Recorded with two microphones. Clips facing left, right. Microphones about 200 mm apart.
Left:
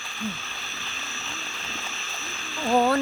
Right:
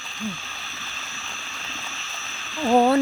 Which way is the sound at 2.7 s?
20° right (ahead or behind).